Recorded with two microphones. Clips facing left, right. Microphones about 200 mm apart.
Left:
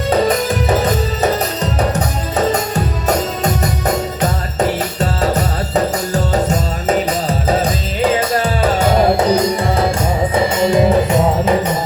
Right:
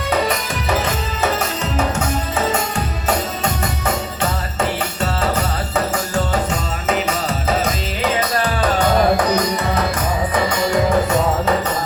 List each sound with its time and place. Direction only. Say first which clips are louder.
0.1 s music: left 6 dB; 35° left (ahead or behind)
2.5 s music: left 4 dB; 40° left (ahead or behind); by 11.5 s 20° left (ahead or behind)